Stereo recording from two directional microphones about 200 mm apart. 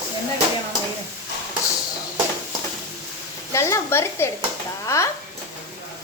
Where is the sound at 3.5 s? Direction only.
15° left (ahead or behind).